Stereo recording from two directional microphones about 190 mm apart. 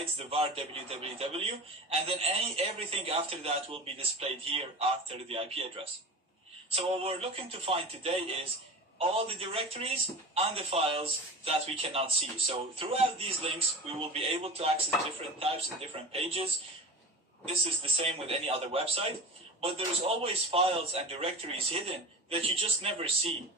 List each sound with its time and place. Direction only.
0.0 s speech: 30° right (ahead or behind)
17.5 s a man's voice: 30° right (ahead or behind)